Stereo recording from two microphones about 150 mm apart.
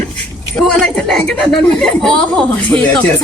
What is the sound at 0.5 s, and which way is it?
A woman's voice, 5° left (ahead or behind).